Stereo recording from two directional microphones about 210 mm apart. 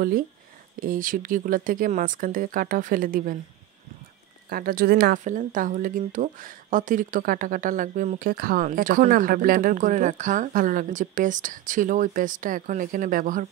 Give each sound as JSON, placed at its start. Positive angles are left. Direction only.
{"t": 0.7, "sound": "speech", "side_deg": -40}
{"t": 4.5, "sound": "speech", "side_deg": -45}